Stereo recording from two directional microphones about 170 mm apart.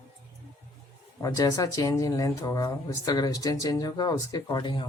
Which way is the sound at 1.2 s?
20° left (ahead or behind).